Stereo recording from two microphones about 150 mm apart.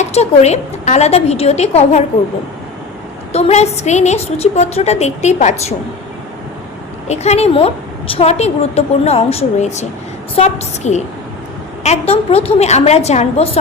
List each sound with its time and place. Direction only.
0.0 s a woman's voice: 45° left (ahead or behind)
3.3 s a woman's voice: 45° left (ahead or behind)
7.1 s a woman's voice: 45° left (ahead or behind)